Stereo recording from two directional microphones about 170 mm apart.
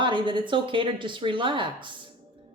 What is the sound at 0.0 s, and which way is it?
A woman's voice, 30° right (ahead or behind).